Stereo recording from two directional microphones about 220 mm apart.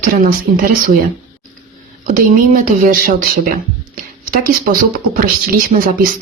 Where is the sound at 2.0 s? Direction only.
35° right (ahead or behind).